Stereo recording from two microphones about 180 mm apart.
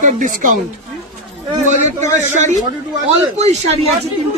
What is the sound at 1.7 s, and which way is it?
Speech, 40° right (ahead or behind).